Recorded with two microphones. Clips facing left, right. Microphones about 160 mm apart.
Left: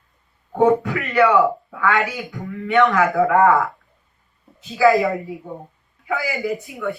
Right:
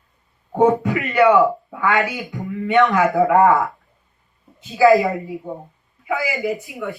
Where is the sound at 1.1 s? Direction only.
20° right (ahead or behind).